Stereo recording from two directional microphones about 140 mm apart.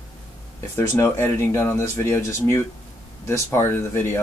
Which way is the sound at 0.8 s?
20° left (ahead or behind).